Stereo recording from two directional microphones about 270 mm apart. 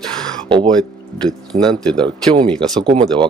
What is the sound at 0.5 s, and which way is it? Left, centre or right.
Speech, centre.